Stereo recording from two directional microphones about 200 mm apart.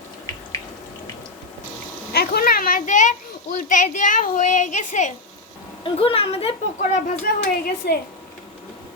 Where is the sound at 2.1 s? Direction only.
50° left (ahead or behind); by 6.5 s 30° left (ahead or behind).